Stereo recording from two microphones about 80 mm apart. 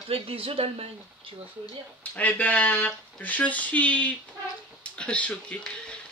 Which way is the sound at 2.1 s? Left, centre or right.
Centre.